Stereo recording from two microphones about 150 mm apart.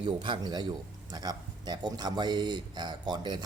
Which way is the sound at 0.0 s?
30° right (ahead or behind).